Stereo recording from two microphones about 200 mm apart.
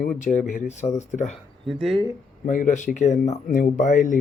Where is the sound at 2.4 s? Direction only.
40° left (ahead or behind).